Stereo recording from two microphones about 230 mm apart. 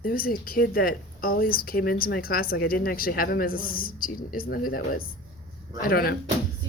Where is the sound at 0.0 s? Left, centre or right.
Left.